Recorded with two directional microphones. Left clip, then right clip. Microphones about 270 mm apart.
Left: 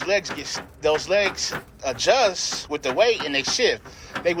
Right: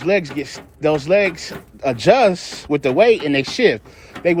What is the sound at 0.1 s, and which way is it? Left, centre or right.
Speech, right.